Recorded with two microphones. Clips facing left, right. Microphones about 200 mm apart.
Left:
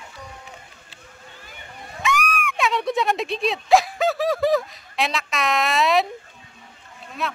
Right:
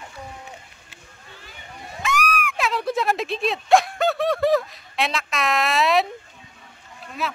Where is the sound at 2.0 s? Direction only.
Centre (ahead or behind).